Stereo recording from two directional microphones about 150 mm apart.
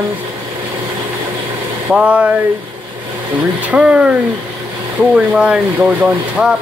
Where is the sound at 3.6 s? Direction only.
10° right (ahead or behind).